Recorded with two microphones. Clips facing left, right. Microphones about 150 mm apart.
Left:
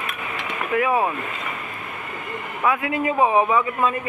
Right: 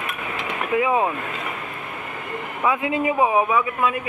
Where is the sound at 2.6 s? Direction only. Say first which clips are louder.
Even; 20° right (ahead or behind).